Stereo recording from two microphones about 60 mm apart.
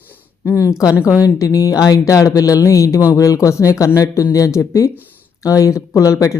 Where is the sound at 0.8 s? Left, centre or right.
Left.